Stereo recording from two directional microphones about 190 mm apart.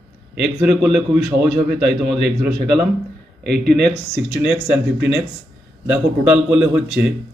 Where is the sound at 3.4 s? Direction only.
55° right (ahead or behind).